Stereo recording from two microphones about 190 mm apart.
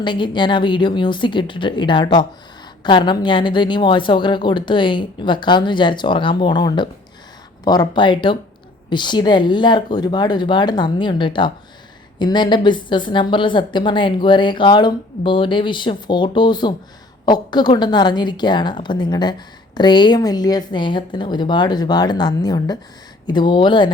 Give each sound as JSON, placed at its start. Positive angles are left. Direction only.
{"t": 0.0, "sound": "a woman's voice", "side_deg": 25}